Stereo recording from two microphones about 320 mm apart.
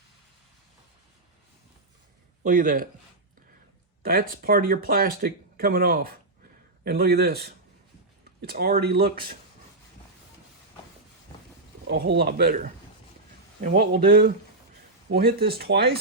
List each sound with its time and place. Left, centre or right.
2.4 s speech: right
4.0 s speech: right
11.9 s speech: right
15.4 s speech: right